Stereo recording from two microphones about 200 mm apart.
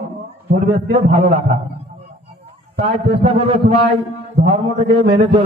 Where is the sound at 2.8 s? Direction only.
25° right (ahead or behind).